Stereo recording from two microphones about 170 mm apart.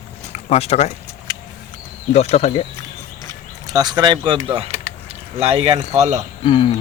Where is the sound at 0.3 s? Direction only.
40° left (ahead or behind).